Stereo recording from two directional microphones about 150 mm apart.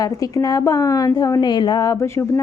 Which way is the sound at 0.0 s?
25° left (ahead or behind).